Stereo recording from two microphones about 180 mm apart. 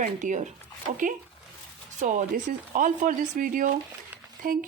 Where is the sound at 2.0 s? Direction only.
45° right (ahead or behind).